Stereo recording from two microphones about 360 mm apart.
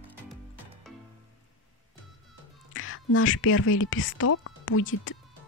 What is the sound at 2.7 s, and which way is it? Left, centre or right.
Speech, left.